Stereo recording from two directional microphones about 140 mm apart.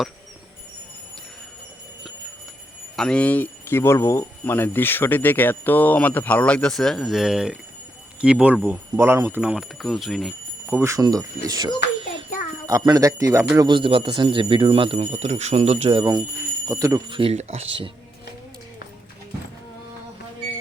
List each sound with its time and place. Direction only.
2.9 s speech: 5° left (ahead or behind)
10.7 s speech: 20° right (ahead or behind)
13.6 s speech: 35° right (ahead or behind)
16.0 s speech: 25° right (ahead or behind)
17.1 s speech: 40° right (ahead or behind)